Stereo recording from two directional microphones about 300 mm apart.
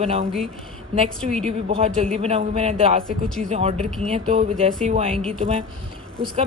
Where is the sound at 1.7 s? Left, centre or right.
Centre.